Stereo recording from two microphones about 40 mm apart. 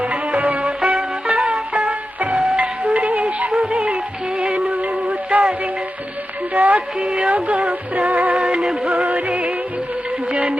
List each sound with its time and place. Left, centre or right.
0.0 s music: right
1.7 s music: right
2.3 s music: centre
2.6 s music: right
3.8 s music: right
6.5 s music: right
10.3 s a sound: right